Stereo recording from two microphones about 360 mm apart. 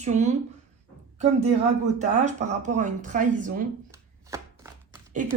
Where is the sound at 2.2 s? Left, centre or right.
Centre.